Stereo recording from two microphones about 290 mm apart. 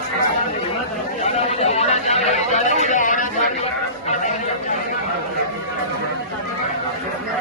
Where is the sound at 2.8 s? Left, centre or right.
Left.